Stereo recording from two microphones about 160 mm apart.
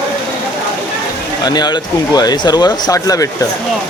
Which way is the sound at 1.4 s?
25° left (ahead or behind).